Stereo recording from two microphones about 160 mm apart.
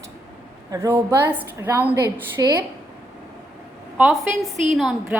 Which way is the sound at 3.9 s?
5° right (ahead or behind).